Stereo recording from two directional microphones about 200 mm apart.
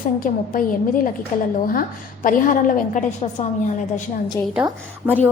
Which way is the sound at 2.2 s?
40° left (ahead or behind).